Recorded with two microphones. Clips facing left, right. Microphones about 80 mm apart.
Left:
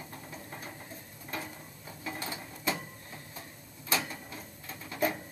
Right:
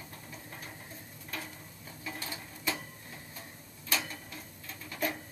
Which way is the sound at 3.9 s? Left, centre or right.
Centre.